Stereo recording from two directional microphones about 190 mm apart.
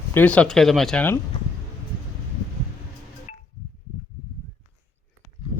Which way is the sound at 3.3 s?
40° left (ahead or behind).